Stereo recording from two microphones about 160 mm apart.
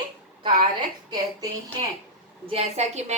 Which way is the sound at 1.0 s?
25° right (ahead or behind).